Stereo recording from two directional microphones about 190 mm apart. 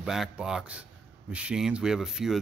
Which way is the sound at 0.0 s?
5° right (ahead or behind).